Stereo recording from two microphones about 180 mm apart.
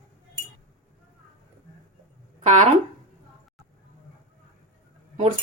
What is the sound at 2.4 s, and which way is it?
Speech, 40° right (ahead or behind).